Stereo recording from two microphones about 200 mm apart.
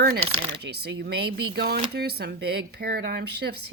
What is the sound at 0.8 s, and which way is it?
A woman's voice, 55° right (ahead or behind).